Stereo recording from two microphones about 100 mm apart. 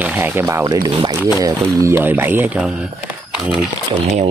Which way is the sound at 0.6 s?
40° right (ahead or behind).